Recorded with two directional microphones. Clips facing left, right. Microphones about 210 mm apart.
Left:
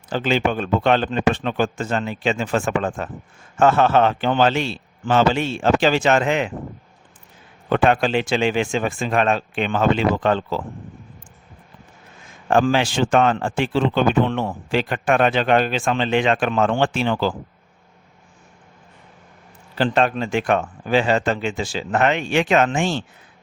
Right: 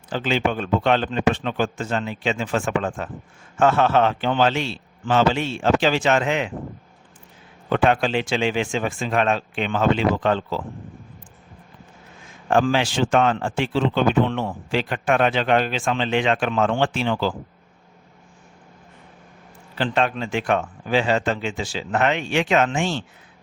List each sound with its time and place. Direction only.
0.1 s speech: 45° left (ahead or behind)
7.7 s speech: 50° left (ahead or behind)
12.5 s speech: 45° left (ahead or behind)
19.8 s speech: 40° left (ahead or behind)